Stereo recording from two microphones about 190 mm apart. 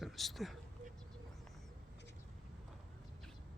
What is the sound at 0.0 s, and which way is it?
Speech, centre (ahead or behind).